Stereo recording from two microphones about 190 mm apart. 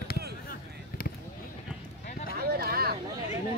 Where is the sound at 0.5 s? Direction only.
50° left (ahead or behind).